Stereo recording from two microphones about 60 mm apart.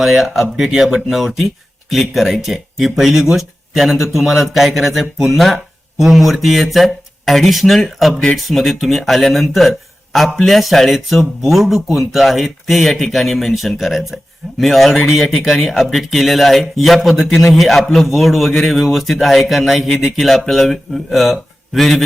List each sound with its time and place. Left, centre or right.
0.0 s speech: centre